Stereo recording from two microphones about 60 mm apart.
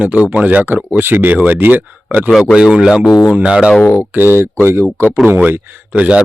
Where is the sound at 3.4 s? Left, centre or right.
Centre.